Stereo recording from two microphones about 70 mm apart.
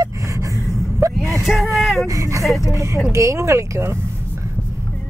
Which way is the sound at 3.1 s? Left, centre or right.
Right.